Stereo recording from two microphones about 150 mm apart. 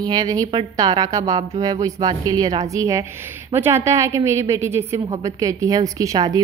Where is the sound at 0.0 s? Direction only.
25° right (ahead or behind).